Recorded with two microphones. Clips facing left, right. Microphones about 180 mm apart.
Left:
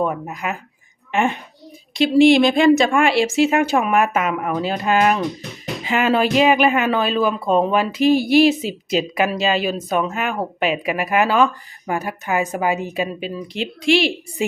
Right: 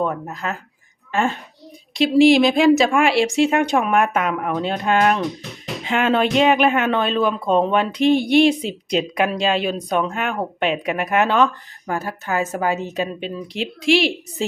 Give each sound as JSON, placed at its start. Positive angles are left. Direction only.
{"t": 0.0, "sound": "speech", "side_deg": 15}
{"t": 1.9, "sound": "speech", "side_deg": 0}
{"t": 11.9, "sound": "speech", "side_deg": 15}